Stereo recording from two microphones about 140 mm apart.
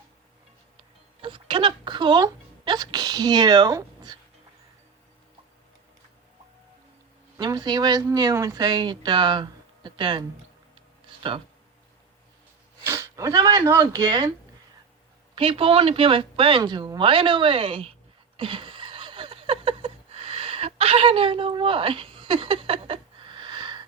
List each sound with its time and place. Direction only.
1.2 s speech: 35° right (ahead or behind)
7.3 s speech: 30° right (ahead or behind)
10.8 s a sound: 40° right (ahead or behind)
12.8 s speech: 20° right (ahead or behind)
15.4 s speech: 40° right (ahead or behind)
18.3 s a sound: 35° right (ahead or behind)